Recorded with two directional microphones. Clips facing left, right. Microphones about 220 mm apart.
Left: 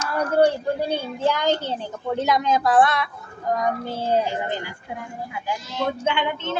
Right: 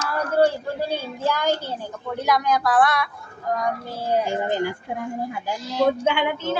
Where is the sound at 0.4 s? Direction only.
15° left (ahead or behind).